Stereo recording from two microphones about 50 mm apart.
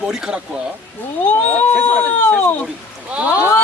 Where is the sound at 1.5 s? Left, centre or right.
Left.